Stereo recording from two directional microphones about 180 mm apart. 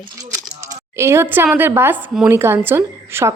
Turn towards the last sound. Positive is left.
turn(degrees=-15)  # may be behind; listen again after turning